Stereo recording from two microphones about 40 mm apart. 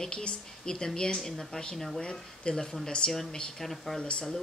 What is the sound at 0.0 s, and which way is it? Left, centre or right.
A woman's voice, left.